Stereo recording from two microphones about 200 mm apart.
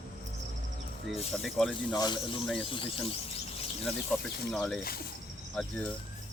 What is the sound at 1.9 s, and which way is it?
Speech, 20° left (ahead or behind).